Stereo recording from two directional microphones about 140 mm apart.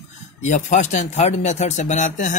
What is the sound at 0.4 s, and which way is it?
Speech, 60° left (ahead or behind).